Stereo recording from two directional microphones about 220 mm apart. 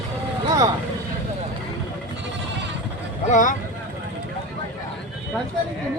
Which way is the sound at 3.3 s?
35° left (ahead or behind).